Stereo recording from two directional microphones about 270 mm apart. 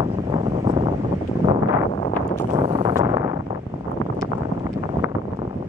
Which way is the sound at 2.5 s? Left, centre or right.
Centre.